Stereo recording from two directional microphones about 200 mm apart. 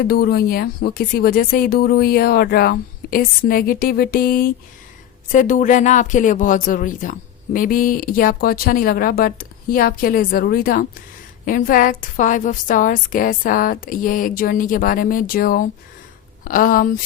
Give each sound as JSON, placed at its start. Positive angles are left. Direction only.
{"t": 0.1, "sound": "speech", "side_deg": 50}